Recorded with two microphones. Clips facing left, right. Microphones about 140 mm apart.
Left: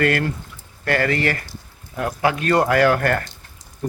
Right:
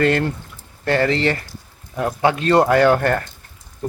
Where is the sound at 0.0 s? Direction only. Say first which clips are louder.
Right 2 dB; 25° right (ahead or behind).